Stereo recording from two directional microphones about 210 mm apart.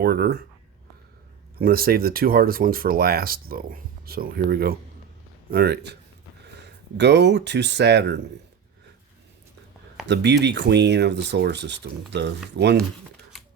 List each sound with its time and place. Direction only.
0.0 s speech: 45° right (ahead or behind)
1.5 s speech: 45° right (ahead or behind)
10.1 s speech: 55° right (ahead or behind)